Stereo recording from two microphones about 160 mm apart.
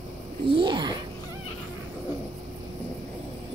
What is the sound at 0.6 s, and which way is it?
Speech, 30° right (ahead or behind).